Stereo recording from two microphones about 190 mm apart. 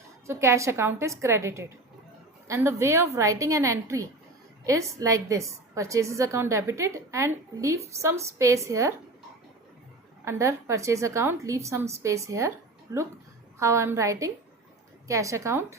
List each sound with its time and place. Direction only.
0.3 s a woman's voice: 15° right (ahead or behind)
10.2 s a woman's voice: 15° right (ahead or behind)